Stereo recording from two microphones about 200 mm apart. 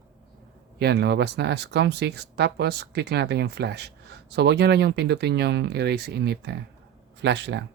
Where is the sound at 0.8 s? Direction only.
55° right (ahead or behind).